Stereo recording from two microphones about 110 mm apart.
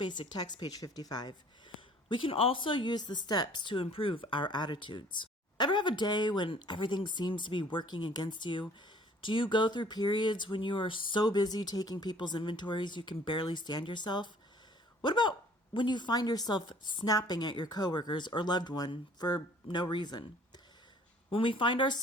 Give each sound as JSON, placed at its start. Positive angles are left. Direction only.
{"t": 0.0, "sound": "speech", "side_deg": 40}
{"t": 2.0, "sound": "speech", "side_deg": 50}
{"t": 21.3, "sound": "speech", "side_deg": 50}